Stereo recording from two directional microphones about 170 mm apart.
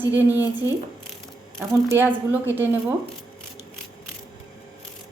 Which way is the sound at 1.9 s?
10° right (ahead or behind).